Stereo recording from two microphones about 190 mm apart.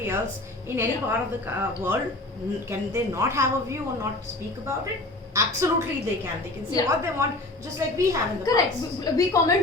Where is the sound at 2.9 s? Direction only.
15° right (ahead or behind).